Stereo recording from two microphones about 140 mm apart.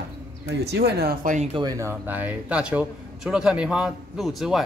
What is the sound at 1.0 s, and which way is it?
Speech, 85° right.